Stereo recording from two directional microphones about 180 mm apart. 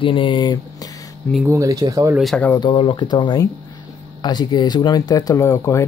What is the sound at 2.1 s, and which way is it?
Speech, centre (ahead or behind).